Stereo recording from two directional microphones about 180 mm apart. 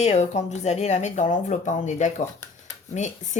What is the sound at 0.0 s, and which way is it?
Speech, 40° left (ahead or behind).